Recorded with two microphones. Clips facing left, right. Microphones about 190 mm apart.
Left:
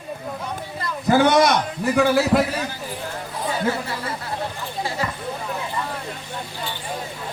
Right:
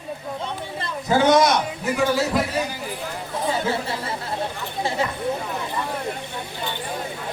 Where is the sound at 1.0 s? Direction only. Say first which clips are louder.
Left 1 dB; 60° left (ahead or behind).